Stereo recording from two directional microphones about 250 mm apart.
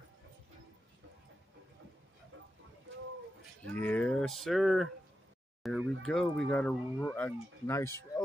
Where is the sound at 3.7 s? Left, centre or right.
Centre.